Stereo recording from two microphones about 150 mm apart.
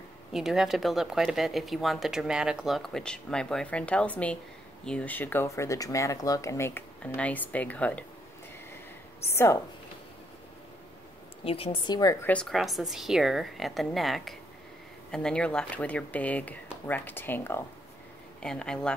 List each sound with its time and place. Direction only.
0.3 s speech: centre (ahead or behind)
9.2 s speech: 15° left (ahead or behind)
11.4 s speech: 40° left (ahead or behind)
12.3 s speech: 5° left (ahead or behind)
18.4 s speech: 5° left (ahead or behind)